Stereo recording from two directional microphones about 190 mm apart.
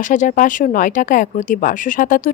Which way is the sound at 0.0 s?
45° left (ahead or behind).